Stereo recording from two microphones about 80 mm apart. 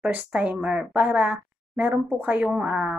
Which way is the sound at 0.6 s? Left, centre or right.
Centre.